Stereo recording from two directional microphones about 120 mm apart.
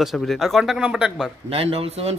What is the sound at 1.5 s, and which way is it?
Speech, 55° right (ahead or behind).